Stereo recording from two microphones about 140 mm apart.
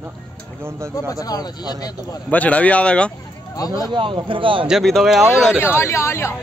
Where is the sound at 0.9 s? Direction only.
25° left (ahead or behind).